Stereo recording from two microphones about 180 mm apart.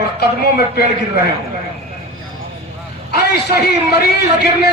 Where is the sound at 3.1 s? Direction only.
65° left (ahead or behind).